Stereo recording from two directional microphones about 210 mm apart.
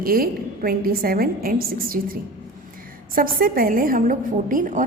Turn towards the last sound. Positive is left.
turn(degrees=-40)  # may be behind; listen again after turning